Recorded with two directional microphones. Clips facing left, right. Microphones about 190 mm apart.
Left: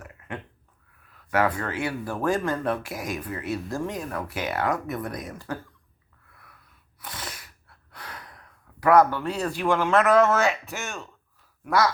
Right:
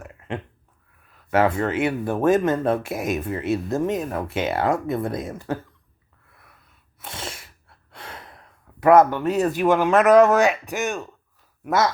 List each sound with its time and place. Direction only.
0.0 s a sound: 25° right (ahead or behind)
1.3 s speech: 25° right (ahead or behind)
6.3 s wheeze: 25° right (ahead or behind)
7.0 s speech: 25° right (ahead or behind)